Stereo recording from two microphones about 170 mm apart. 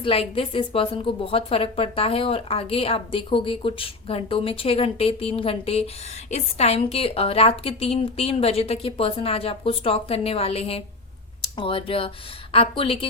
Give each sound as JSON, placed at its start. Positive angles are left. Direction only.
{"t": 0.0, "sound": "a woman's voice", "side_deg": 35}